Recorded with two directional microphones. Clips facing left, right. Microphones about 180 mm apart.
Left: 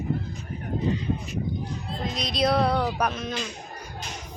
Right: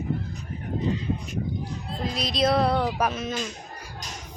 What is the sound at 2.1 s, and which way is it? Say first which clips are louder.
Music: right 1 dB; centre (ahead or behind).